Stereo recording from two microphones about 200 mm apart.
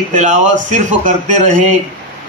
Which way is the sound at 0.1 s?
35° right (ahead or behind).